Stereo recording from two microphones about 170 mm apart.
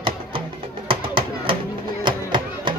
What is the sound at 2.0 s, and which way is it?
Music, 30° right (ahead or behind).